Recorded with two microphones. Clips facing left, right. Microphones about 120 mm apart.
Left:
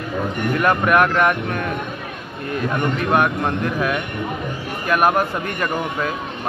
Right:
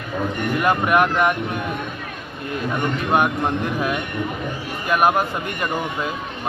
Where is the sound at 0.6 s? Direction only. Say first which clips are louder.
Left 1 dB; 15° right (ahead or behind).